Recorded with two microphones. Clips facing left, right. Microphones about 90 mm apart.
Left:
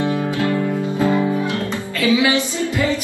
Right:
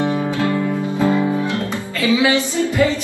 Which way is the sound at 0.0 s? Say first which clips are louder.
Right 1 dB; 25° right (ahead or behind).